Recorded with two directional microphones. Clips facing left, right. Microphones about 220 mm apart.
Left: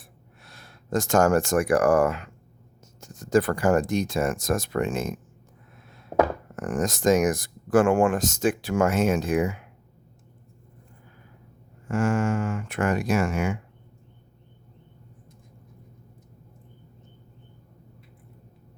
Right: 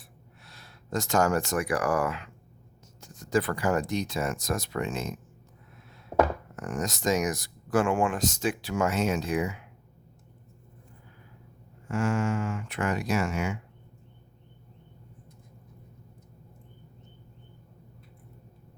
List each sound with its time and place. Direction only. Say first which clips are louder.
0.4 s speech: left 4 dB; 50° left (ahead or behind)
6.6 s speech: left 6 dB; 50° left (ahead or behind)
11.9 s speech: left 4 dB; 50° left (ahead or behind)